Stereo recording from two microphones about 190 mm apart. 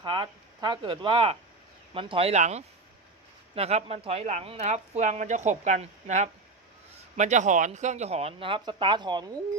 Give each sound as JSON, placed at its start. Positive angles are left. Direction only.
{"t": 0.0, "sound": "speech", "side_deg": -25}